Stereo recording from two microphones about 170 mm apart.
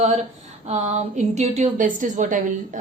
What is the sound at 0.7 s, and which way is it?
A woman's voice, 45° right (ahead or behind).